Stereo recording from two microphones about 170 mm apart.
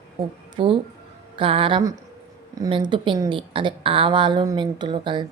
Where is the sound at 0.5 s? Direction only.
30° right (ahead or behind).